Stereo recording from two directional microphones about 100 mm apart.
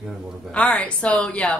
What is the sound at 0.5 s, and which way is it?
A woman's voice, 10° left (ahead or behind).